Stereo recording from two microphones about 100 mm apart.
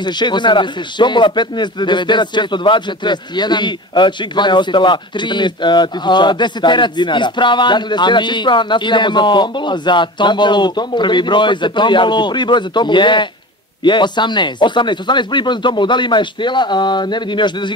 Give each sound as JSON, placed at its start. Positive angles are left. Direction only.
{"t": 0.0, "sound": "speech", "side_deg": 50}